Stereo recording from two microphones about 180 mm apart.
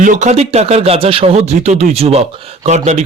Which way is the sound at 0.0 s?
45° right (ahead or behind).